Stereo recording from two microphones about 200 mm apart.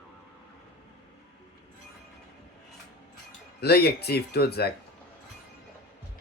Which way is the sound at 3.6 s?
55° left (ahead or behind).